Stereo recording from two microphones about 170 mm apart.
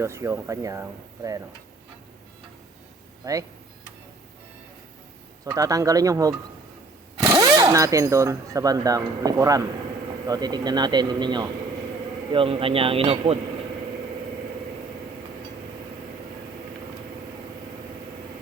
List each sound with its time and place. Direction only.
0.0 s speech: 15° right (ahead or behind)
3.2 s a man's voice: 20° right (ahead or behind)
5.5 s a man's voice: 20° right (ahead or behind)